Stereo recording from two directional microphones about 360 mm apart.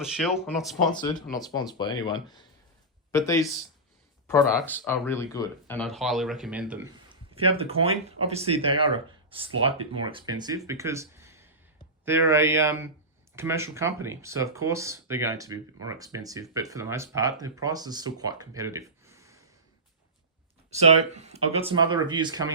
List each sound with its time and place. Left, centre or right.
0.0 s speech: centre
0.9 s speech: centre
20.7 s speech: centre